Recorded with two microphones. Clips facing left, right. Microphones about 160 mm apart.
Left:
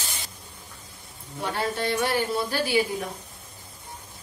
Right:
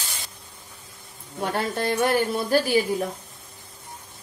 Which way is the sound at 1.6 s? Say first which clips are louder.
Right 2 dB; 50° right (ahead or behind).